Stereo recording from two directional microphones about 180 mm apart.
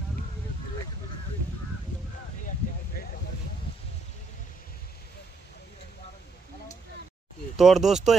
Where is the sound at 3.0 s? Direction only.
55° left (ahead or behind).